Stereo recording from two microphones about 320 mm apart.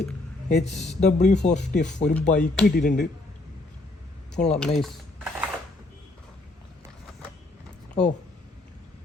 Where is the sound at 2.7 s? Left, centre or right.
Left.